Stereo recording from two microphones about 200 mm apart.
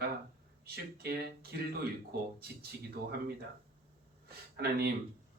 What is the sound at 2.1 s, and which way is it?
Speech, 50° right (ahead or behind).